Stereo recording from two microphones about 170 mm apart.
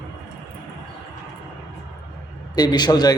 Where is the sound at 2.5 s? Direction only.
25° left (ahead or behind).